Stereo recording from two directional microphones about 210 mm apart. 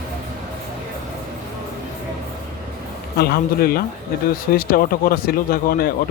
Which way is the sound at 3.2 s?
45° left (ahead or behind).